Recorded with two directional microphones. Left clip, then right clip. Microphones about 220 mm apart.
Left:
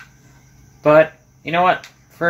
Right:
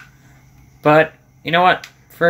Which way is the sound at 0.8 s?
35° right (ahead or behind).